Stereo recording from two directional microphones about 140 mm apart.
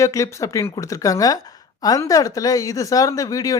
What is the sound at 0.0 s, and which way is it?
Speech, 20° left (ahead or behind).